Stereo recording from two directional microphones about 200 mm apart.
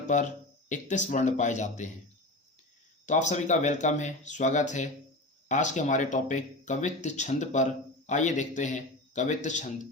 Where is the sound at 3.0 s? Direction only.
35° left (ahead or behind).